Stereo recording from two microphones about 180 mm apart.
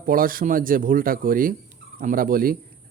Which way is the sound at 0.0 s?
50° right (ahead or behind).